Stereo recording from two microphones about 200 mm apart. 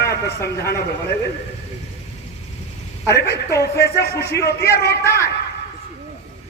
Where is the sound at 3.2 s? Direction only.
55° left (ahead or behind).